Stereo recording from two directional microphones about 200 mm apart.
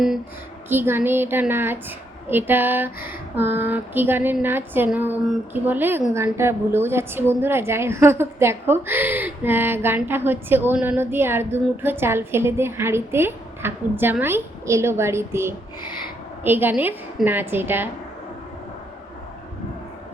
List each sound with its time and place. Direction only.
0.7 s a woman's voice: 10° right (ahead or behind)